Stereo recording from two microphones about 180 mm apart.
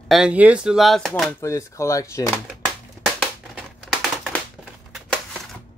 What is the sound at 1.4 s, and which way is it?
Speech, 15° left (ahead or behind).